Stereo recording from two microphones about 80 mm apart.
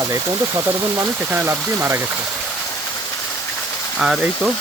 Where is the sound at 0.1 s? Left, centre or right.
Right.